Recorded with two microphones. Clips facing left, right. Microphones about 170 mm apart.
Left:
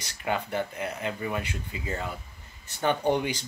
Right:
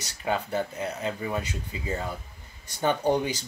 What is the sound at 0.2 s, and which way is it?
Speech, 25° right (ahead or behind).